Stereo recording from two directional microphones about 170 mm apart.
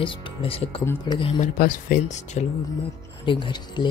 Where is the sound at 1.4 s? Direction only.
55° left (ahead or behind).